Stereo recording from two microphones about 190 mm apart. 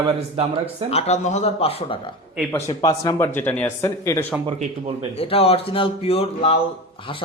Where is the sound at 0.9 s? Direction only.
35° left (ahead or behind); by 4.2 s 15° left (ahead or behind).